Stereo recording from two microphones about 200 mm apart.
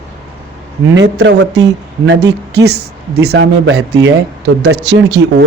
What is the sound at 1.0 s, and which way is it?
Speech, 60° right (ahead or behind).